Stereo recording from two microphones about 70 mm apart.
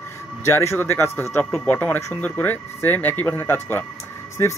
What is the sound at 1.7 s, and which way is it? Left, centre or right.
Speech, left.